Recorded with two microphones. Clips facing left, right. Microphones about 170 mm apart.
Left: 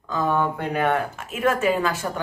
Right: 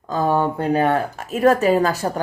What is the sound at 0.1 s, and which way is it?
A woman's voice, 35° right (ahead or behind).